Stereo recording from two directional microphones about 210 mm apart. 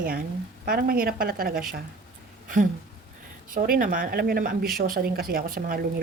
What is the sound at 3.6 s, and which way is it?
Speech, 40° right (ahead or behind).